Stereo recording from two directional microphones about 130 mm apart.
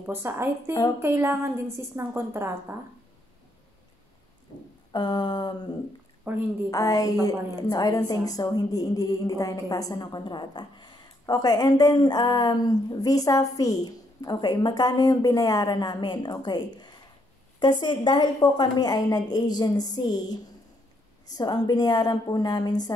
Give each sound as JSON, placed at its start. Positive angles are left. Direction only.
{"t": 0.0, "sound": "a woman's voice", "side_deg": -15}
{"t": 4.9, "sound": "a woman's voice", "side_deg": 35}
{"t": 6.3, "sound": "a woman's voice", "side_deg": -15}
{"t": 6.7, "sound": "a woman's voice", "side_deg": 25}
{"t": 21.4, "sound": "a woman's voice", "side_deg": 30}